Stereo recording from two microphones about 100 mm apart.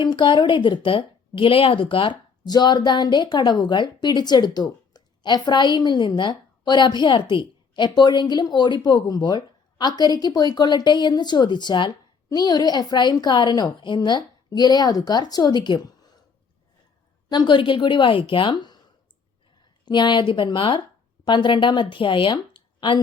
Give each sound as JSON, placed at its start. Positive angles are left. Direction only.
{"t": 0.0, "sound": "a woman's voice", "side_deg": 50}
{"t": 17.2, "sound": "a woman's voice", "side_deg": 50}
{"t": 19.8, "sound": "a woman's voice", "side_deg": 50}